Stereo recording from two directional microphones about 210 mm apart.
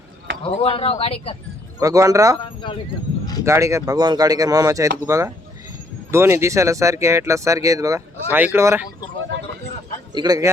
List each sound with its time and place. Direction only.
0.4 s speech: 25° left (ahead or behind)
1.8 s speech: 15° right (ahead or behind)
2.4 s speech: 25° left (ahead or behind)
3.4 s speech: 15° right (ahead or behind)
10.1 s a man's voice: 20° right (ahead or behind)